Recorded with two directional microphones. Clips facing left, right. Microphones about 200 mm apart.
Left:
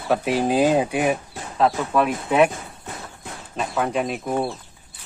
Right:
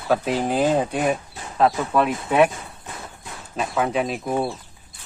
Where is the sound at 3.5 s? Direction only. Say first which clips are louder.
Right 1 dB; centre (ahead or behind).